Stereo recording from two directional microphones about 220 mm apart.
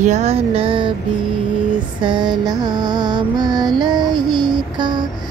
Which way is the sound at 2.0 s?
20° right (ahead or behind).